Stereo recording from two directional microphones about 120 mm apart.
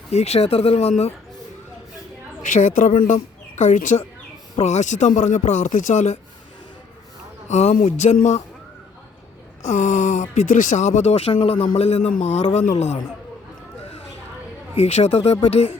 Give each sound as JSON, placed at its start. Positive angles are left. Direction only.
{"t": 0.1, "sound": "speech", "side_deg": 65}
{"t": 2.4, "sound": "a woman's voice", "side_deg": 90}
{"t": 4.6, "sound": "speech", "side_deg": 80}
{"t": 7.4, "sound": "speech", "side_deg": 70}
{"t": 9.6, "sound": "speech", "side_deg": 90}
{"t": 14.8, "sound": "speech", "side_deg": 65}